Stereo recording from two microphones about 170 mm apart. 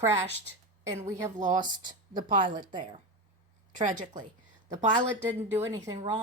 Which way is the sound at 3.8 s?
50° right (ahead or behind).